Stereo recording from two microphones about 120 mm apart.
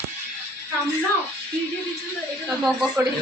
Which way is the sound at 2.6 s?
10° right (ahead or behind).